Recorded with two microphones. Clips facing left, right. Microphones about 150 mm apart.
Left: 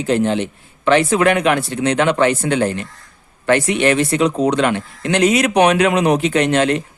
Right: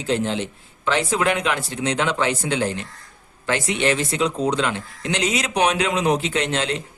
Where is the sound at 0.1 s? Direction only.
60° left (ahead or behind).